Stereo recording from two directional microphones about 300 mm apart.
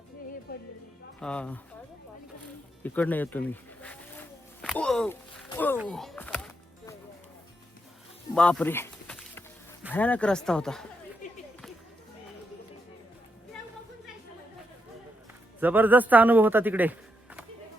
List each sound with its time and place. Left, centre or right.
0.5 s music: left
1.2 s speech: centre
2.8 s a sound: centre
5.5 s music: centre
8.4 s a sound: centre
9.9 s speech: centre
15.6 s speech: centre